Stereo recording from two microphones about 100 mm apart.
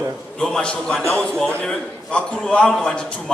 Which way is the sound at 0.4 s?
5° left (ahead or behind).